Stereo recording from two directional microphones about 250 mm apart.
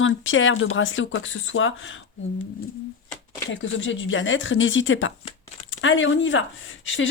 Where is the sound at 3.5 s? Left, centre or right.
Left.